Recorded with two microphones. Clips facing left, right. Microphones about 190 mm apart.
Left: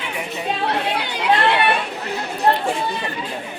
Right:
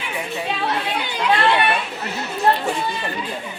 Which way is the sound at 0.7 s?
65° left (ahead or behind).